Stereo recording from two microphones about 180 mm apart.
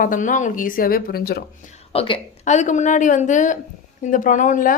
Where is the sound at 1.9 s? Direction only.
30° left (ahead or behind).